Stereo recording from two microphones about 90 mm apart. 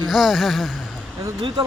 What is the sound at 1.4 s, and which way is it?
Speech, 60° right (ahead or behind).